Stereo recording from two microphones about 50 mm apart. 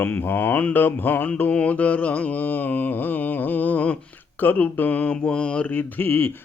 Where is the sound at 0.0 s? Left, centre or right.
Left.